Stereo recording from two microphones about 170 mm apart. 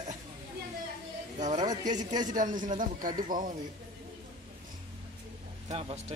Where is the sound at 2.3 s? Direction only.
50° right (ahead or behind).